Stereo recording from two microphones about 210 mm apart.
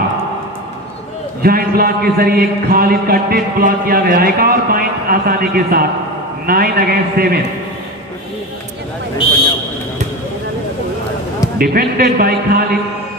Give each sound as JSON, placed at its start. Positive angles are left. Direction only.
{"t": 1.4, "sound": "a man's voice", "side_deg": -45}
{"t": 11.5, "sound": "a man's voice", "side_deg": -45}